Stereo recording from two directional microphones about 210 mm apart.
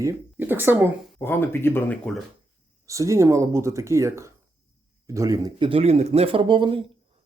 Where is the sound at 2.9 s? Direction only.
15° right (ahead or behind).